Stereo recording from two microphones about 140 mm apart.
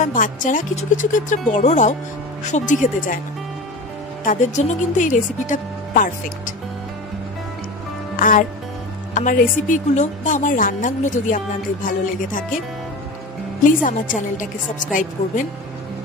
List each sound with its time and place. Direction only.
0.0 s a woman's voice: 70° left (ahead or behind)
4.2 s a woman's voice: 65° left (ahead or behind)
8.2 s a woman's voice: 70° left (ahead or behind)
13.8 s a woman's voice: 70° left (ahead or behind)